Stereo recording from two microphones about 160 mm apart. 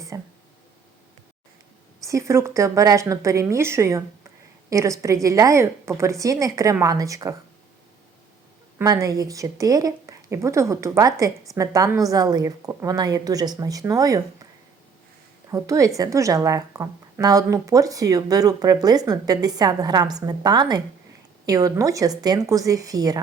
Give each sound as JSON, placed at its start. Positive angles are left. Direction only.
{"t": 0.1, "sound": "a woman's voice", "side_deg": -20}
{"t": 2.0, "sound": "a woman's voice", "side_deg": -20}
{"t": 8.8, "sound": "a woman's voice", "side_deg": -20}
{"t": 15.4, "sound": "a woman's voice", "side_deg": -20}